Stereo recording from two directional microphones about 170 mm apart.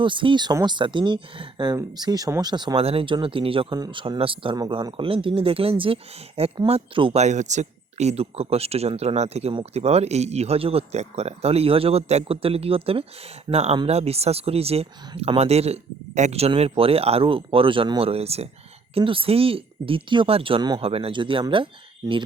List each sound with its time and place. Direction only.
0.0 s speech: 30° right (ahead or behind)